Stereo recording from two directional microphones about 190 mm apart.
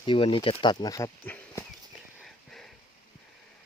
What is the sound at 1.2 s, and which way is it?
Horse, 10° left (ahead or behind).